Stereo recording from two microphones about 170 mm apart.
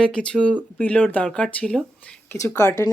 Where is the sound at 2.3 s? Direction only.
15° left (ahead or behind).